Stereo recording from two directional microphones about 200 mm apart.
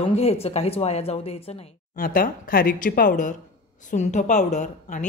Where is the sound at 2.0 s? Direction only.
45° left (ahead or behind).